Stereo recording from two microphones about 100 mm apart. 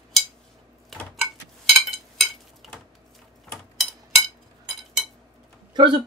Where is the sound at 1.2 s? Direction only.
Centre (ahead or behind).